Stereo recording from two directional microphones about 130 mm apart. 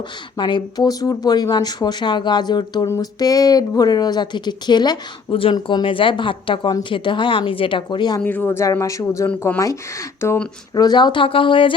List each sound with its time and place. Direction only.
0.3 s a woman's voice: 35° left (ahead or behind)
5.3 s a woman's voice: 45° left (ahead or behind)
8.2 s speech: 15° left (ahead or behind)
10.8 s a woman's voice: 35° left (ahead or behind)